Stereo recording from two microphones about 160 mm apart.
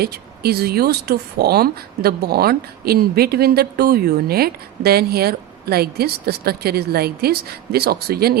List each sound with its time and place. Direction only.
0.0 s speech: 75° right (ahead or behind)